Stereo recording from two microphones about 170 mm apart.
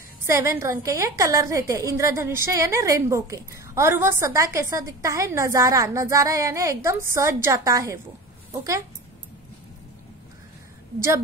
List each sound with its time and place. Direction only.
0.3 s a woman's voice: 15° right (ahead or behind)